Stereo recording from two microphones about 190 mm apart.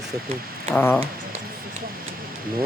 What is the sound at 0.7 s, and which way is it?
Speech, 10° left (ahead or behind).